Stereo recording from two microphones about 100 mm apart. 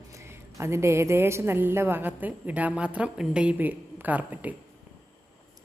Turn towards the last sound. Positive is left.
turn(degrees=-15)  # may be behind; listen again after turning